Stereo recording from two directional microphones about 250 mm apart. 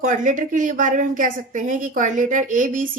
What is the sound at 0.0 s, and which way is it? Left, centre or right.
A woman's voice, right.